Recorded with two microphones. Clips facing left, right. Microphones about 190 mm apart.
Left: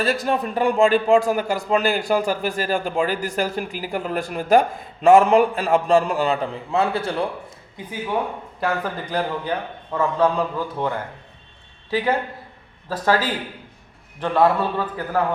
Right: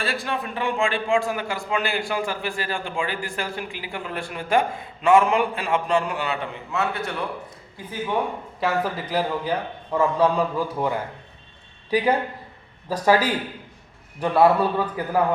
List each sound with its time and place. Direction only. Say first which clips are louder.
0.0 s a man's voice: left 6 dB; 40° left (ahead or behind)
7.8 s speech: left 3 dB; 20° left (ahead or behind)
8.6 s a man's voice: even; 5° right (ahead or behind)